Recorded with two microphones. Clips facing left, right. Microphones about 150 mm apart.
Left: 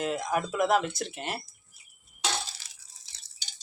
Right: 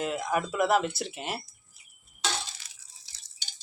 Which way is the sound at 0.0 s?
5° right (ahead or behind).